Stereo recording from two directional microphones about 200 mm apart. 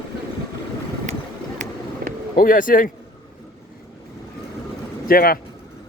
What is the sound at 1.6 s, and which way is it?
Vehicle, 40° right (ahead or behind).